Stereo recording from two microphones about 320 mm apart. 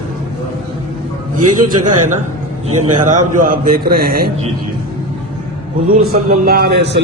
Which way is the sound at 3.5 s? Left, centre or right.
Right.